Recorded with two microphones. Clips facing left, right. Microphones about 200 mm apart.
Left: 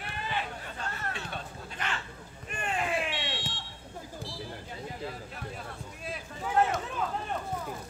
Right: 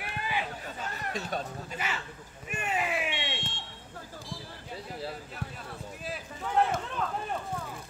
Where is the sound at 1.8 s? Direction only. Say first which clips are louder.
Left 2 dB; 5° right (ahead or behind).